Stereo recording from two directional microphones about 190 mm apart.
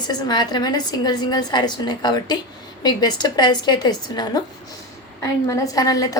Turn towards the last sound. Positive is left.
turn(degrees=20)  # may be behind; listen again after turning